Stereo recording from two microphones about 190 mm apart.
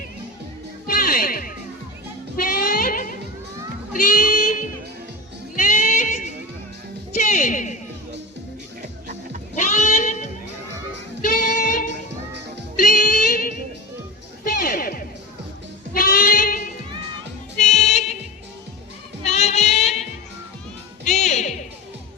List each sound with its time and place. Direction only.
0.9 s music: 50° left (ahead or behind)
5.5 s music: 40° left (ahead or behind)
7.3 s a sound: 40° left (ahead or behind)
9.6 s goat: 40° left (ahead or behind)
11.2 s music: 45° left (ahead or behind)
15.9 s sheep: 50° left (ahead or behind)
17.6 s music: 35° left (ahead or behind)
19.2 s music: 35° left (ahead or behind)
21.0 s music: 35° left (ahead or behind)